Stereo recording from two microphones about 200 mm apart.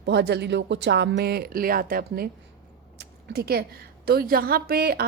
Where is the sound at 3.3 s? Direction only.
50° right (ahead or behind).